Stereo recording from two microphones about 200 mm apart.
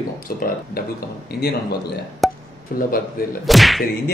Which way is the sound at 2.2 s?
Centre (ahead or behind).